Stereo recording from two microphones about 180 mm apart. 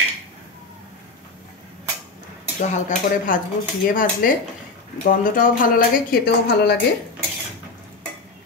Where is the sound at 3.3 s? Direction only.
50° left (ahead or behind).